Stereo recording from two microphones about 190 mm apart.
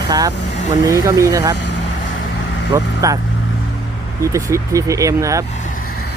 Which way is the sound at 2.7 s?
20° right (ahead or behind).